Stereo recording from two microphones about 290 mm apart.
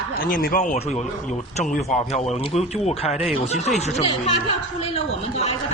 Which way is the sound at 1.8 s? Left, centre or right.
Left.